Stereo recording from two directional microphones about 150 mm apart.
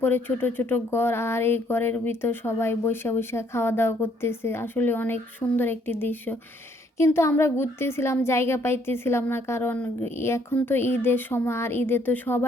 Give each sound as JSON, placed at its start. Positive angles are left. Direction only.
{"t": 0.0, "sound": "speech", "side_deg": 15}